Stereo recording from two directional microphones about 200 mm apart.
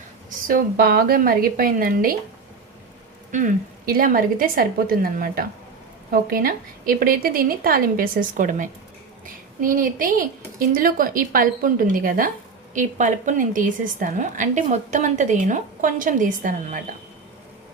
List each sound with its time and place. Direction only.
0.3 s a woman's voice: 45° right (ahead or behind)
3.3 s a woman's voice: 40° right (ahead or behind)